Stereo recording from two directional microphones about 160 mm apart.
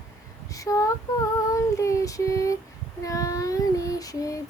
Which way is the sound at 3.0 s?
20° left (ahead or behind).